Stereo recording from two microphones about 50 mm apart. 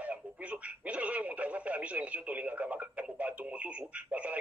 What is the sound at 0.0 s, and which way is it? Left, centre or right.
Speech, right.